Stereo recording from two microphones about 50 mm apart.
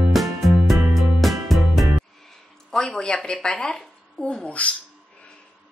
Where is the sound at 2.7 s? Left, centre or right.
Centre.